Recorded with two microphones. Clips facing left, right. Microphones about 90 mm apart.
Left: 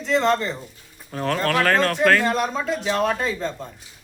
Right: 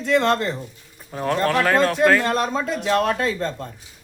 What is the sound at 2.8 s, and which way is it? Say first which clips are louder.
Speech: right 3 dB; 60° right (ahead or behind).